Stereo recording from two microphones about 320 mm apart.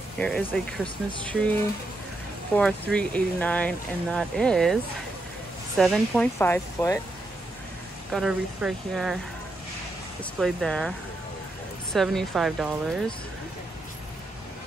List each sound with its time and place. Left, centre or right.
0.2 s speech: centre
5.8 s speech: centre
8.1 s speech: centre
10.4 s speech: centre
11.9 s speech: centre